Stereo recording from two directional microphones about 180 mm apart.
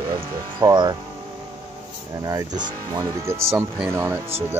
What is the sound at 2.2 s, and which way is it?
Speech, 20° right (ahead or behind).